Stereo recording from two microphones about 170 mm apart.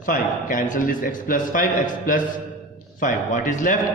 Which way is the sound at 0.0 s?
50° left (ahead or behind).